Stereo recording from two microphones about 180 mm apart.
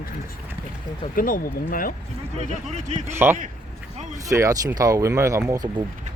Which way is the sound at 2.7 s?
40° right (ahead or behind).